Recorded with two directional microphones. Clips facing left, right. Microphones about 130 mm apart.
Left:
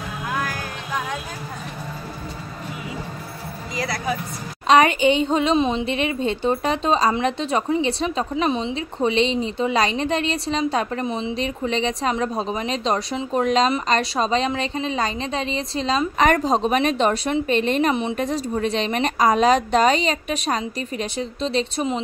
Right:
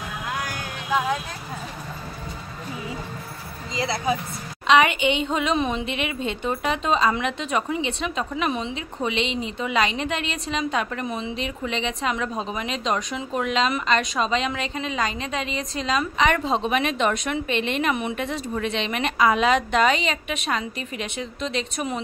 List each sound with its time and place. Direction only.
3.7 s speech: 25° right (ahead or behind)
4.6 s a woman's voice: 40° left (ahead or behind)
5.9 s a woman's voice: 35° left (ahead or behind)
16.2 s a woman's voice: 40° left (ahead or behind)